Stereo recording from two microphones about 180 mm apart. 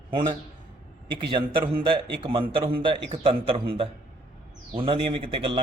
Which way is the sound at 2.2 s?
30° right (ahead or behind).